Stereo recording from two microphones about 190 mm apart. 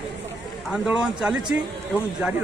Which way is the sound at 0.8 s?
5° right (ahead or behind).